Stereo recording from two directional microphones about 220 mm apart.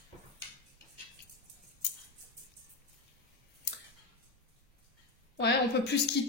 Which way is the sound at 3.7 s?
50° left (ahead or behind).